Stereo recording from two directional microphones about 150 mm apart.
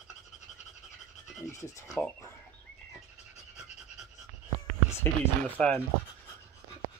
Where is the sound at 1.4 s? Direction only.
20° left (ahead or behind).